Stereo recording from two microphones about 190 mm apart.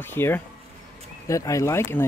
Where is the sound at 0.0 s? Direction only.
10° left (ahead or behind).